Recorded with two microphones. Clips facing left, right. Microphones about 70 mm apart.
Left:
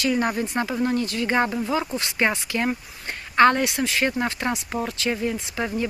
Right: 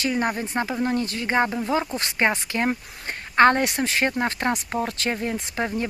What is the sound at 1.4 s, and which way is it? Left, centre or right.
Speech, centre.